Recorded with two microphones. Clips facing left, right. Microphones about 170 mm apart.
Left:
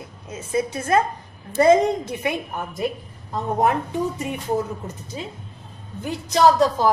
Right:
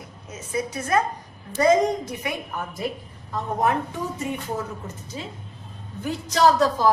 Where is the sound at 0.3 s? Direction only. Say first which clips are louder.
Left 4 dB; 30° left (ahead or behind).